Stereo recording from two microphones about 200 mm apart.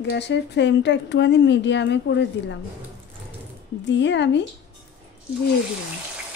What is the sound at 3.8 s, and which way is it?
Speech, 60° left (ahead or behind).